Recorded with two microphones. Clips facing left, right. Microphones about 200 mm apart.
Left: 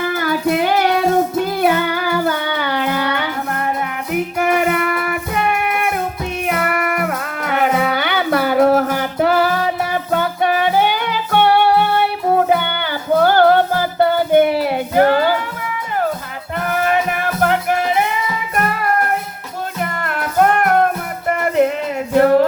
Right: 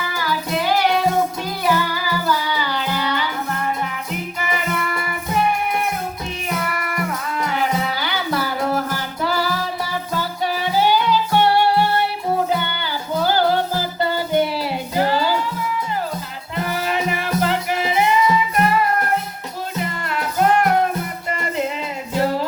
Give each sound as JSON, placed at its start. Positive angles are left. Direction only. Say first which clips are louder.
{"t": 0.0, "sound": "music", "louder": "left 7 dB", "side_deg": 55}
{"t": 16.6, "sound": "music", "louder": "left 4 dB", "side_deg": 55}
{"t": 19.8, "sound": "music", "louder": "left 3 dB", "side_deg": 55}